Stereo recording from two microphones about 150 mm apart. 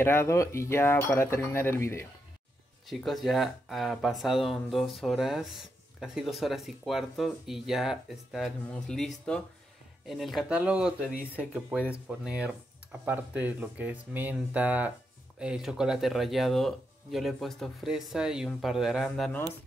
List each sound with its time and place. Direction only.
0.0 s cutlery: 15° left (ahead or behind)
2.9 s speech: centre (ahead or behind)